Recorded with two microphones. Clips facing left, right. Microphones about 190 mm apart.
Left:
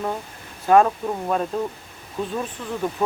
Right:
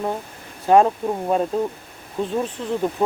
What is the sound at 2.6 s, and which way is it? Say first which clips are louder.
Speech: right 5 dB; 20° right (ahead or behind).